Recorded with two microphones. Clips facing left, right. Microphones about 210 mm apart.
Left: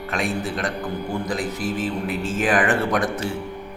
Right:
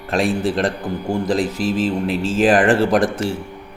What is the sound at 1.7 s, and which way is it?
Speech, 90° right.